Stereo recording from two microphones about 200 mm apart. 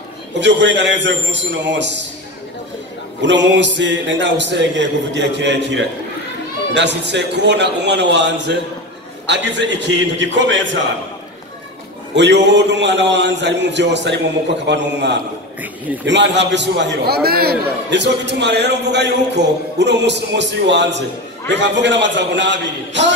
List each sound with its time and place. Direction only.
0.4 s a man's voice: 65° right (ahead or behind)
3.2 s a man's voice: 65° right (ahead or behind)
12.2 s a man's voice: 60° right (ahead or behind)